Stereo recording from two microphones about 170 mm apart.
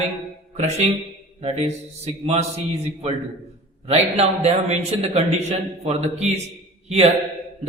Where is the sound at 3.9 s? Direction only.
40° right (ahead or behind).